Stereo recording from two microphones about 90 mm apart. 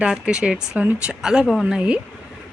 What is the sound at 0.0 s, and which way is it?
Speech, 10° right (ahead or behind).